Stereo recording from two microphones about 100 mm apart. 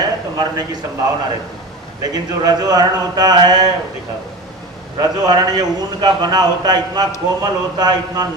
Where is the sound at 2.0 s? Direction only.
40° right (ahead or behind).